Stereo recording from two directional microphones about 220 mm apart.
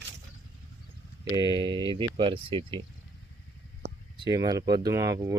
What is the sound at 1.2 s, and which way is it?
Speech, 20° right (ahead or behind).